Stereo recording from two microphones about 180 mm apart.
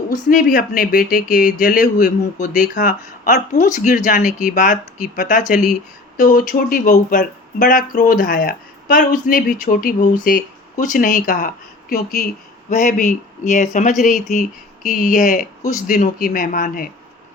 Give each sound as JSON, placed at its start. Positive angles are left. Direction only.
{"t": 0.1, "sound": "speech", "side_deg": 50}